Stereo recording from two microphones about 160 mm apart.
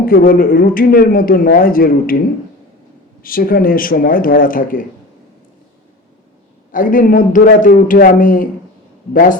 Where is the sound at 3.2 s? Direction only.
60° left (ahead or behind).